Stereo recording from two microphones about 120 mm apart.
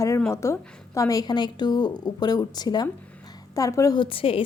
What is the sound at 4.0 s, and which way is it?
Speech, 50° left (ahead or behind).